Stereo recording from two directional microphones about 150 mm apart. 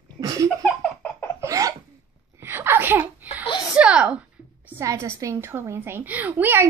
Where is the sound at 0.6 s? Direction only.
5° left (ahead or behind).